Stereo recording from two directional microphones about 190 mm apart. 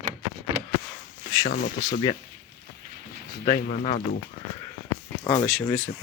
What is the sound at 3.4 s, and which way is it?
Speech, 45° left (ahead or behind).